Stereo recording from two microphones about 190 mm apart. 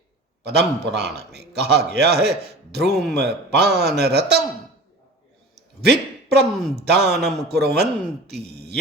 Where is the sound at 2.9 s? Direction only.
Centre (ahead or behind).